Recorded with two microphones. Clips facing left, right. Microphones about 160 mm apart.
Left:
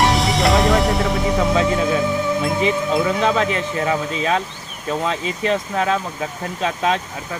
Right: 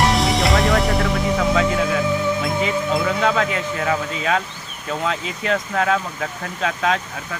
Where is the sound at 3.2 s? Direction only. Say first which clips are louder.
Left 1 dB; 20° left (ahead or behind).